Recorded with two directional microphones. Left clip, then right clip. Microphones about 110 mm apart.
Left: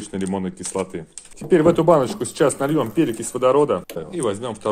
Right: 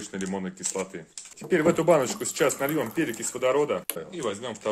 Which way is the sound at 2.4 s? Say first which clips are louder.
Left 6 dB; 30° left (ahead or behind).